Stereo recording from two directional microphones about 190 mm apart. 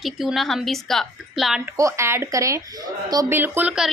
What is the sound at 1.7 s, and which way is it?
A woman's voice, 15° right (ahead or behind).